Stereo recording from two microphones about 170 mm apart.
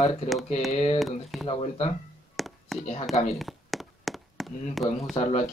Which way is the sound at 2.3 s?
Centre (ahead or behind).